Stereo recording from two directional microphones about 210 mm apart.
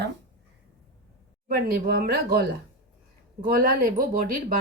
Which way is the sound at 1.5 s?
45° right (ahead or behind).